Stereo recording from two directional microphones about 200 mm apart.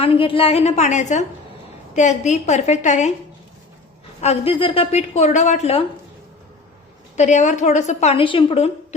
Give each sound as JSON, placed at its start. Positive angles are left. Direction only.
{"t": 0.0, "sound": "a woman's voice", "side_deg": 25}
{"t": 4.2, "sound": "a woman's voice", "side_deg": 30}
{"t": 7.2, "sound": "a woman's voice", "side_deg": 35}